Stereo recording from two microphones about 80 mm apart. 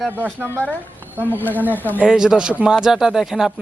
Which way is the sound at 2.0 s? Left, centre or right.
Centre.